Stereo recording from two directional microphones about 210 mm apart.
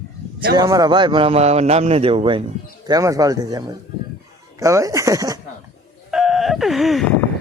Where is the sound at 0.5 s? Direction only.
15° right (ahead or behind).